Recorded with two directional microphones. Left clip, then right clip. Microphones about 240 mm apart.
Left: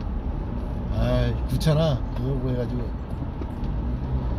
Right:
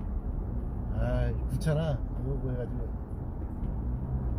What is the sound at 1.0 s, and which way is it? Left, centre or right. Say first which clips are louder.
Speech: left 8 dB; left.